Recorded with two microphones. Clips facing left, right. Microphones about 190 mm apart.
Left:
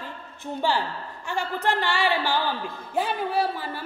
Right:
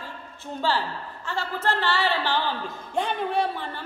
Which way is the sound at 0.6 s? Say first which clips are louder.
Even; 15° left (ahead or behind).